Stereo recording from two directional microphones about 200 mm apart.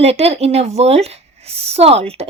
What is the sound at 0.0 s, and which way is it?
A woman's voice, 30° right (ahead or behind).